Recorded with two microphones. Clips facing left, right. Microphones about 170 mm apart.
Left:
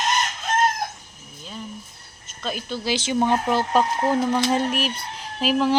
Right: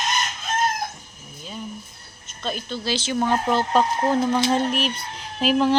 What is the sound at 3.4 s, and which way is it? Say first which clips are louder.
Speech: even; 5° left (ahead or behind).